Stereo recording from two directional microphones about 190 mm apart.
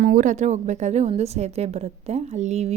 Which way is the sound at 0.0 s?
45° right (ahead or behind).